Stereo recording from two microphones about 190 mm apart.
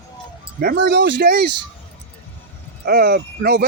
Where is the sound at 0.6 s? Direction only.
55° right (ahead or behind).